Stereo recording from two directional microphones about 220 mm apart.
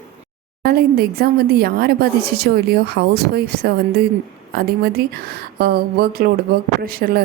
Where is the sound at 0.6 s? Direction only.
45° right (ahead or behind).